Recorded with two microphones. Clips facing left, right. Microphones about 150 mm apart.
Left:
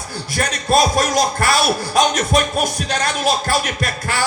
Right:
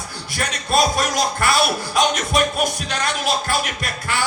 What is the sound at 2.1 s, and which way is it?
Music, 40° left (ahead or behind).